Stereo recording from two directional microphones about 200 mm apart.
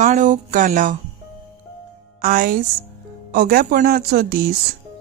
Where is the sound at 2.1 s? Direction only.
45° right (ahead or behind).